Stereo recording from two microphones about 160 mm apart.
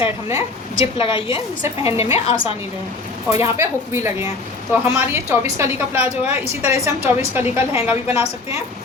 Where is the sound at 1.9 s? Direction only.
15° right (ahead or behind).